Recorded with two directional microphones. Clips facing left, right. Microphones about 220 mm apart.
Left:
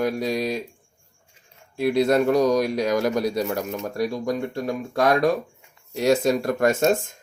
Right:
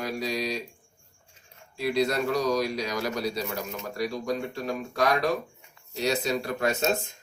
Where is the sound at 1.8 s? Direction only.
50° left (ahead or behind).